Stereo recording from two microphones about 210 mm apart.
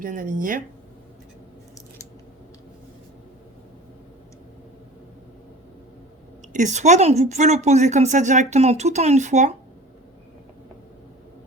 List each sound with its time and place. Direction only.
0.0 s a woman's voice: 40° right (ahead or behind)
6.5 s a woman's voice: 35° right (ahead or behind)